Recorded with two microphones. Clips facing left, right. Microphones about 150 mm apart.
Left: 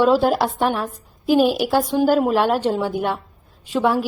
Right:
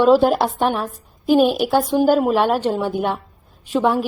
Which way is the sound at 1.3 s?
5° left (ahead or behind).